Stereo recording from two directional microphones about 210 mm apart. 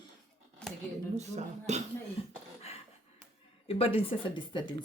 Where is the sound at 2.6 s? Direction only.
30° left (ahead or behind).